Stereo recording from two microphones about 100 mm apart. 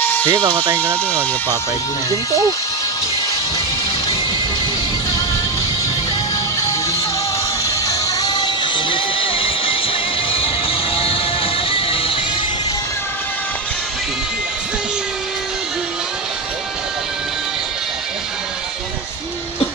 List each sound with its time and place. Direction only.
0.0 s speech: 15° left (ahead or behind)
7.6 s music: 35° left (ahead or behind); by 12.2 s 65° left (ahead or behind)